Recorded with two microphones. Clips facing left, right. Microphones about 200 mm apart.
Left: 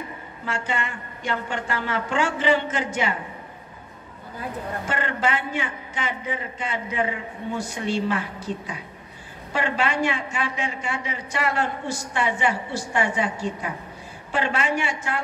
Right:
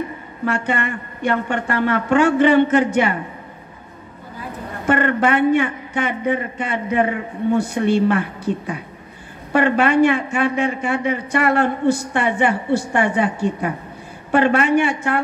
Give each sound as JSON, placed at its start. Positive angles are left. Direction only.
{"t": 0.5, "sound": "a man's voice", "side_deg": -60}
{"t": 4.8, "sound": "a man's voice", "side_deg": -60}